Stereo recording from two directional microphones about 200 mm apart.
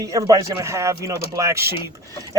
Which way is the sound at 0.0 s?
15° right (ahead or behind).